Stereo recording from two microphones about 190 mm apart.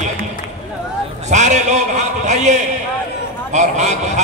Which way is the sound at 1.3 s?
40° right (ahead or behind).